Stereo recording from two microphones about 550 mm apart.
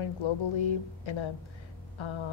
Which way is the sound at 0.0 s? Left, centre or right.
Left.